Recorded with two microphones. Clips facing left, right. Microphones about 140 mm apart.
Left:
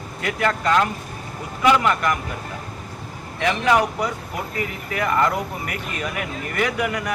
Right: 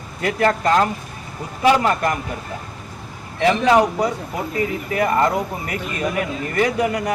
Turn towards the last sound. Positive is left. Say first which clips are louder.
# right 4 dB
turn(degrees=-30)  # may be behind; listen again after turning